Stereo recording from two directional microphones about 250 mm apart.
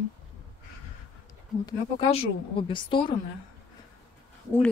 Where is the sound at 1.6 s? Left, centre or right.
Left.